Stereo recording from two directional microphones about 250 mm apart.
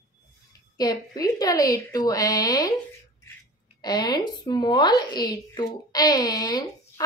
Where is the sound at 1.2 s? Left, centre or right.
Centre.